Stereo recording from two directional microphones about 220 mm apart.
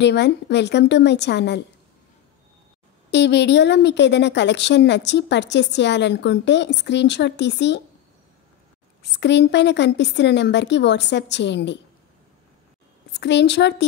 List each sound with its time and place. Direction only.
0.0 s a woman's voice: 50° left (ahead or behind)
3.1 s a woman's voice: 50° left (ahead or behind)
9.2 s a woman's voice: 50° left (ahead or behind)
13.1 s a woman's voice: 50° left (ahead or behind)